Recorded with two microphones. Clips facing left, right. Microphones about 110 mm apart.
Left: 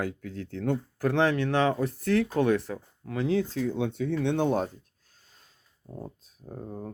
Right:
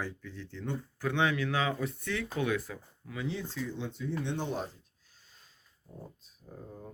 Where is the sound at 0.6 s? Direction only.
55° left (ahead or behind).